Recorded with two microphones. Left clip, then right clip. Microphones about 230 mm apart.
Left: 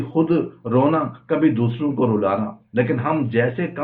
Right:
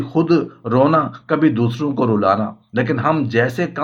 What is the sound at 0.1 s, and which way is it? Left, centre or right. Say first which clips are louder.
Speech: right 3 dB; right.